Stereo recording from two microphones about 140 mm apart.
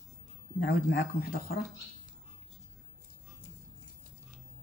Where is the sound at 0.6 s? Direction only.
90° left.